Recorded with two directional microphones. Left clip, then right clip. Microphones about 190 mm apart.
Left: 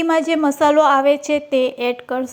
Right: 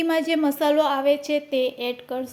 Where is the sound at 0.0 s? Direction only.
20° left (ahead or behind).